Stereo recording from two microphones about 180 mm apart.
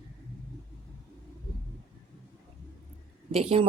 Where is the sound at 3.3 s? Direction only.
35° right (ahead or behind).